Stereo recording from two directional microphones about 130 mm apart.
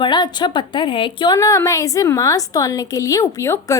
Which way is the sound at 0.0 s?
35° left (ahead or behind).